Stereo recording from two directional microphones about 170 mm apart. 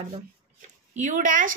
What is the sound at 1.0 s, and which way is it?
Speech, 45° right (ahead or behind).